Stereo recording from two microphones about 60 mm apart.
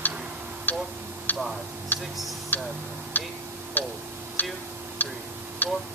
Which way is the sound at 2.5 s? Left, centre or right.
Left.